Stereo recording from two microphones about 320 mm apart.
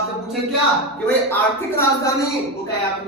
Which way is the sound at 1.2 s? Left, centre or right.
Centre.